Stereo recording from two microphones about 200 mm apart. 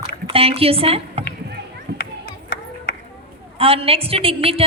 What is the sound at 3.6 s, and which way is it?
A man's voice, 30° right (ahead or behind).